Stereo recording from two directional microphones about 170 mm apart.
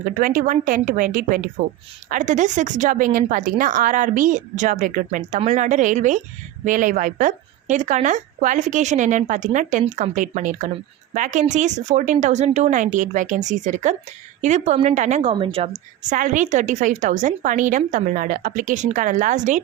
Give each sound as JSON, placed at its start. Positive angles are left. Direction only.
{"t": 0.0, "sound": "a woman's voice", "side_deg": -55}
{"t": 16.0, "sound": "speech", "side_deg": -50}